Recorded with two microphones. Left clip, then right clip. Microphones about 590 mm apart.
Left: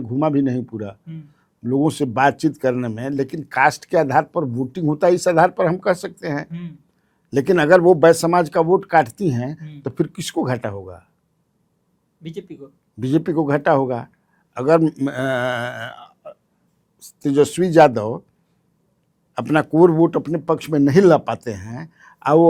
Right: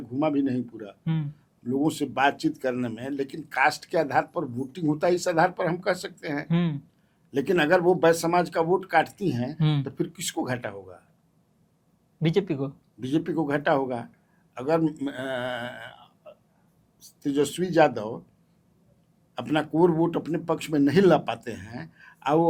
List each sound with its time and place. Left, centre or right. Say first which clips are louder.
0.1 s speech: left 6 dB; left
6.5 s speech: right 8 dB; right
7.3 s speech: left 8 dB; left
12.2 s speech: right 9 dB; right
13.0 s speech: left 7 dB; left
19.3 s speech: left 8 dB; left